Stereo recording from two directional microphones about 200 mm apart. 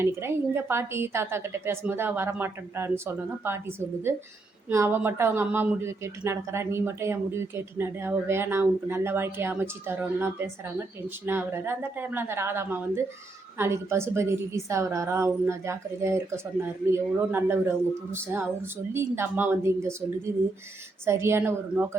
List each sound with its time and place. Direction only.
0.0 s speech: 10° right (ahead or behind)